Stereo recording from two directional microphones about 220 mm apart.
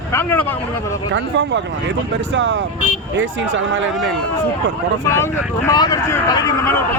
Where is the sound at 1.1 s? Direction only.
55° right (ahead or behind).